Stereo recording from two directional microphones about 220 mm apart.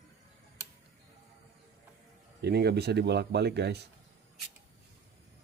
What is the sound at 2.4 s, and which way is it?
Speech, 50° right (ahead or behind).